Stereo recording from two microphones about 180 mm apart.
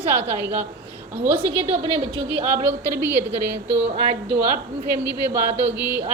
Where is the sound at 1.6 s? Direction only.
30° right (ahead or behind).